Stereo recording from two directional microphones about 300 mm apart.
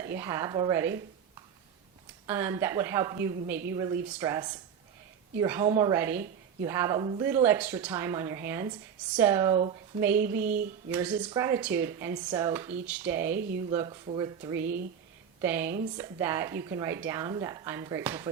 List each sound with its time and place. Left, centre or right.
0.0 s a woman's voice: centre
2.2 s a woman's voice: centre
10.4 s a sound: right
10.9 s a woman's voice: centre